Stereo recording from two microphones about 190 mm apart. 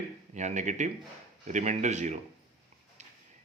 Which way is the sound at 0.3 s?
40° right (ahead or behind).